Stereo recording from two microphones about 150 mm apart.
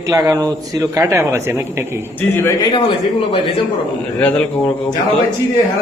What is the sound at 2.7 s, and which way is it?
Speech, 35° left (ahead or behind).